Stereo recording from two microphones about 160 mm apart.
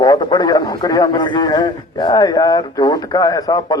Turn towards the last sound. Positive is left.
turn(degrees=25)  # may be behind; listen again after turning